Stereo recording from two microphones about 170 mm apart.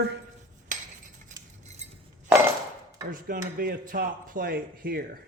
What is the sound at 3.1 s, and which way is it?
Speech, 55° right (ahead or behind).